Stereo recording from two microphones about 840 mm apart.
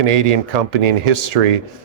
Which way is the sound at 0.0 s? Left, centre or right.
Right.